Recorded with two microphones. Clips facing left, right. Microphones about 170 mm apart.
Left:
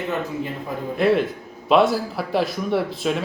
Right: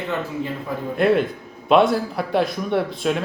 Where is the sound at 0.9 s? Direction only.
Centre (ahead or behind).